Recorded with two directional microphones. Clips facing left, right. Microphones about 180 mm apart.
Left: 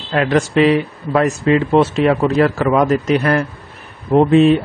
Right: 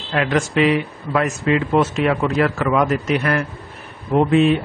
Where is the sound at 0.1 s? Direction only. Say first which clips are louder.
Left 4 dB; 35° left (ahead or behind).